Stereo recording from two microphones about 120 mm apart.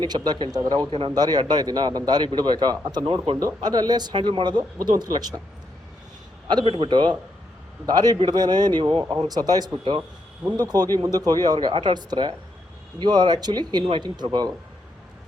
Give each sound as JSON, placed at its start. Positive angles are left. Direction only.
{"t": 0.0, "sound": "a man's voice", "side_deg": -35}
{"t": 0.9, "sound": "speech", "side_deg": -50}
{"t": 1.1, "sound": "a man's voice", "side_deg": -35}
{"t": 6.7, "sound": "speech", "side_deg": -50}
{"t": 7.9, "sound": "a man's voice", "side_deg": -35}